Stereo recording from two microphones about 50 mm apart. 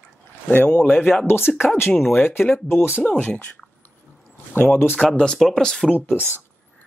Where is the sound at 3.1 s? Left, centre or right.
Left.